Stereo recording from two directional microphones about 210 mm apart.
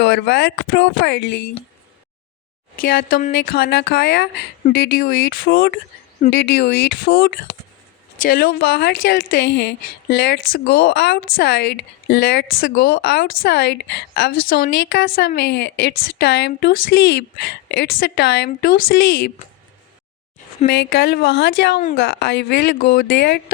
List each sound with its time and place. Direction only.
0.0 s speech: 55° left (ahead or behind)
2.7 s a woman's voice: 45° left (ahead or behind)
6.2 s speech: 35° left (ahead or behind)
6.6 s a woman's voice: 50° left (ahead or behind)
20.7 s a woman's voice: 45° left (ahead or behind)